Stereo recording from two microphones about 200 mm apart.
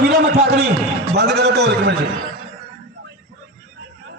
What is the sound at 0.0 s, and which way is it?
A man's voice, 55° right (ahead or behind).